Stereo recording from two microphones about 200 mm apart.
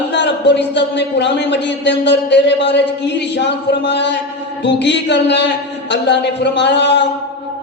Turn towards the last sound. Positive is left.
turn(degrees=60)  # may be behind; listen again after turning